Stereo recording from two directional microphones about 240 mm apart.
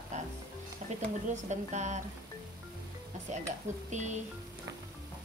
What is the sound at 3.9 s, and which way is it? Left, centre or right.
Speech, right.